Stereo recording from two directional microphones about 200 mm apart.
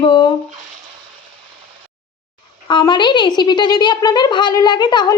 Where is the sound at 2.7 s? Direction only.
25° left (ahead or behind).